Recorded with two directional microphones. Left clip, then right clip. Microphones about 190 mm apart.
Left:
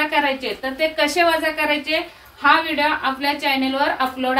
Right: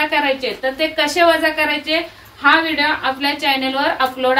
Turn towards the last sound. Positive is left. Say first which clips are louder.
# right 3 dB
turn(degrees=-15)  # may be behind; listen again after turning